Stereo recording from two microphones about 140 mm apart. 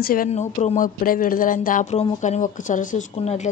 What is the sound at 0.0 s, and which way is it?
Speech, 90° left.